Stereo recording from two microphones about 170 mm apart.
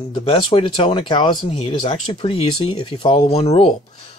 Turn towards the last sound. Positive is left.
turn(degrees=35)  # may be behind; listen again after turning